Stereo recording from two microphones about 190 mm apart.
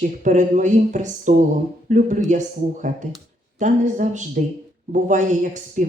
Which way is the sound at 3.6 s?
40° right (ahead or behind).